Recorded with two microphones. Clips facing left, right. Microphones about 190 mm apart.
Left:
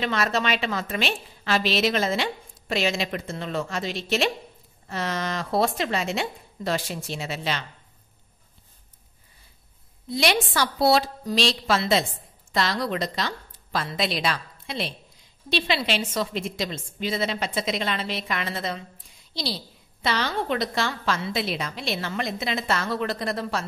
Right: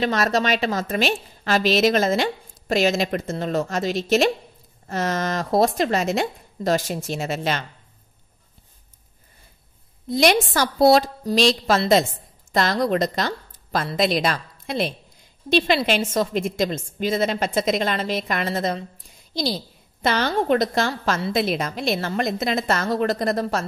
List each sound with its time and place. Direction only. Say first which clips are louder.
0.0 s a woman's voice: right 4 dB; 40° right (ahead or behind)
10.0 s a woman's voice: right 5 dB; 45° right (ahead or behind)